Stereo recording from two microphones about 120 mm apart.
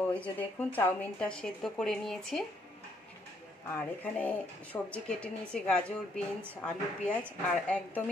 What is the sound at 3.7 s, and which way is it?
Speech, 15° left (ahead or behind).